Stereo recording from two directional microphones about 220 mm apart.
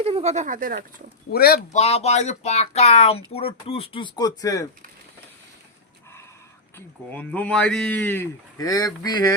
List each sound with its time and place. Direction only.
0.0 s speech: 30° right (ahead or behind)
1.3 s speech: 45° left (ahead or behind)
1.8 s speech: 30° left (ahead or behind)
6.7 s speech: 10° left (ahead or behind)